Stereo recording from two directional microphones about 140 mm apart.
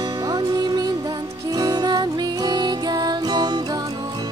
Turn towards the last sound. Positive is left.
turn(degrees=-30)  # may be behind; listen again after turning